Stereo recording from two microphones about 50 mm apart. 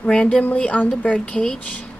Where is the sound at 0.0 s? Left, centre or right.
Left.